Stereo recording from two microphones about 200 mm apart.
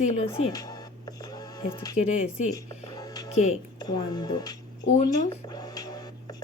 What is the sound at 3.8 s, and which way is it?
Speech, 20° left (ahead or behind).